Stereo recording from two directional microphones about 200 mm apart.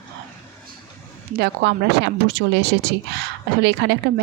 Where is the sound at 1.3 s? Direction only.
55° right (ahead or behind).